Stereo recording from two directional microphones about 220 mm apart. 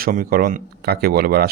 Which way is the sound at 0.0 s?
40° right (ahead or behind).